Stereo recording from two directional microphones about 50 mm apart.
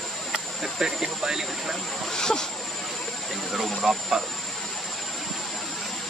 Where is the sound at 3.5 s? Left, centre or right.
Centre.